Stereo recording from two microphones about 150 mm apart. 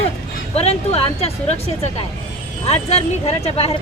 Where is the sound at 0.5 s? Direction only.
45° left (ahead or behind).